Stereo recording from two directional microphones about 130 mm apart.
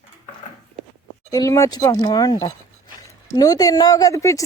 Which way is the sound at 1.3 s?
25° left (ahead or behind).